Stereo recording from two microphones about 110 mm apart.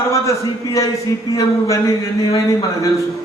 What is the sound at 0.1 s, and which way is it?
A man's voice, 30° left (ahead or behind).